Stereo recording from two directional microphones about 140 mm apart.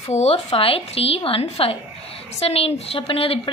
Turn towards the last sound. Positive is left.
turn(degrees=40)  # may be behind; listen again after turning